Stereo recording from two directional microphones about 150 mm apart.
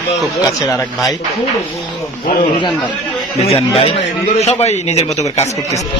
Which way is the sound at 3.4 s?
40° left (ahead or behind).